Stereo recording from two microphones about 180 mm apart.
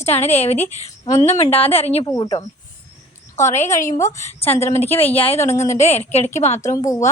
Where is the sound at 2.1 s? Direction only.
25° left (ahead or behind).